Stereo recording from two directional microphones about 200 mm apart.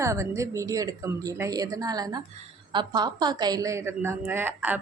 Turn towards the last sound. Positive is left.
turn(degrees=-10)  # may be behind; listen again after turning